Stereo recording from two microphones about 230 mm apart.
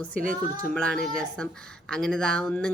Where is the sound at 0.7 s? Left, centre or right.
Centre.